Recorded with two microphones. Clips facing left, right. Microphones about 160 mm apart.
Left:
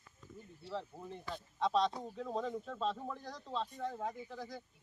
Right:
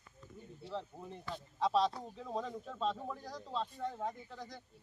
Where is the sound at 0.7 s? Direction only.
Centre (ahead or behind).